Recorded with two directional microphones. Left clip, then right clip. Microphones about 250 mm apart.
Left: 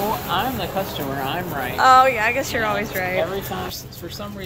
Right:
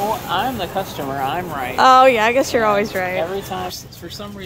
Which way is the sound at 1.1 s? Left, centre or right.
Centre.